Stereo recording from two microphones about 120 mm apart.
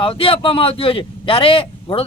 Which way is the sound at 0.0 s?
50° left (ahead or behind).